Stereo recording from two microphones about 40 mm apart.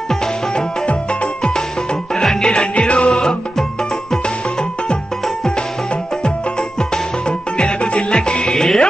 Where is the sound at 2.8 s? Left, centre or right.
Left.